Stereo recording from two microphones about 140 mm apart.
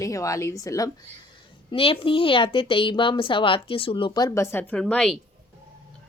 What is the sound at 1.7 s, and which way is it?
A woman's voice, 40° left (ahead or behind).